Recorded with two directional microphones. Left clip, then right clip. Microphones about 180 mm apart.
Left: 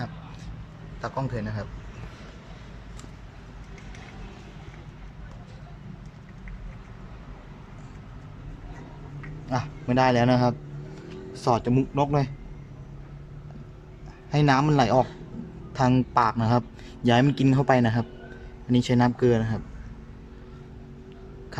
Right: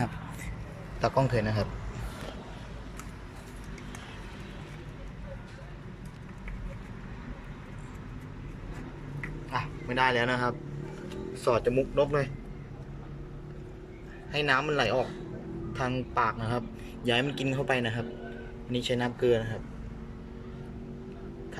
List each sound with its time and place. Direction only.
1.0 s a man's voice: 5° right (ahead or behind)
9.5 s a man's voice: 30° left (ahead or behind)
14.3 s a man's voice: 35° left (ahead or behind)